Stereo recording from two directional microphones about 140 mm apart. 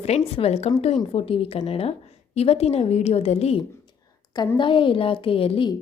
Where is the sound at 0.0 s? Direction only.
45° left (ahead or behind).